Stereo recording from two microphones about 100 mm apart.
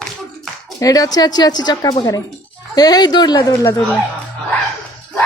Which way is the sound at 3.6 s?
30° left (ahead or behind).